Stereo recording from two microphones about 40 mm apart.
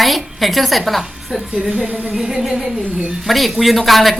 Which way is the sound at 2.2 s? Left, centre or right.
Centre.